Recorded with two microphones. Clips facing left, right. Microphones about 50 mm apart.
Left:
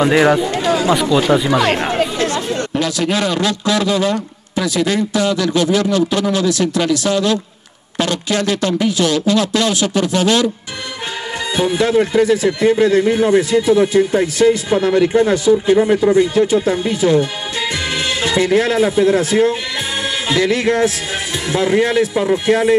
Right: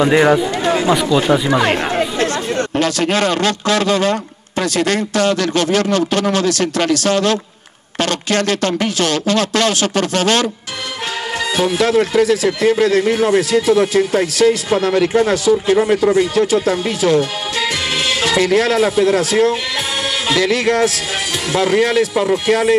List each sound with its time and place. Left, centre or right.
0.0 s speech: centre
2.8 s a man's voice: right
11.5 s speech: right
20.2 s music: right
21.5 s speech: right